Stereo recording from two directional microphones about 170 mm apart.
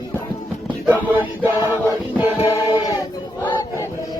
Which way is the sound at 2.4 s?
15° left (ahead or behind).